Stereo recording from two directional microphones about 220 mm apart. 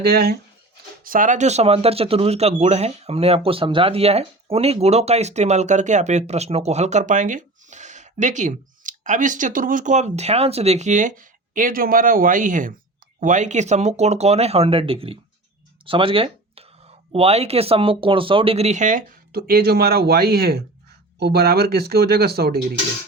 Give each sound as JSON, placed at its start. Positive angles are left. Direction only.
{"t": 0.0, "sound": "speech", "side_deg": -45}